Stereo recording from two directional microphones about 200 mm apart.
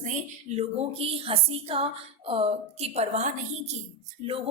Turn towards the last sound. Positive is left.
turn(degrees=-30)  # may be behind; listen again after turning